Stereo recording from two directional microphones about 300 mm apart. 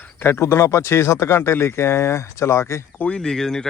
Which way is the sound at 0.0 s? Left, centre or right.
Centre.